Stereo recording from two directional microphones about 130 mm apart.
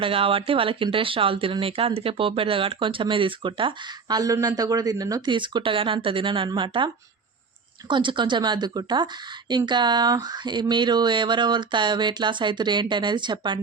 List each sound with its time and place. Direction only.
0.0 s speech: 45° right (ahead or behind)